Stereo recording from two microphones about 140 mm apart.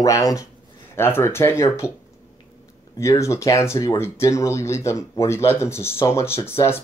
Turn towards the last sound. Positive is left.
turn(degrees=20)  # may be behind; listen again after turning